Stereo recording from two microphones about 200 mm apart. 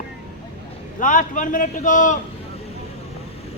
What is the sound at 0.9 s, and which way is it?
A man's voice, 40° left (ahead or behind).